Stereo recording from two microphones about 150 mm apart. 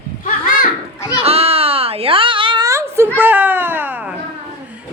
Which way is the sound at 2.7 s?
15° right (ahead or behind).